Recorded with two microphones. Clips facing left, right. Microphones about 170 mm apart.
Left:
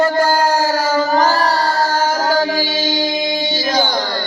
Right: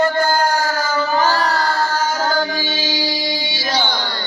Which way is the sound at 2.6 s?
50° left (ahead or behind).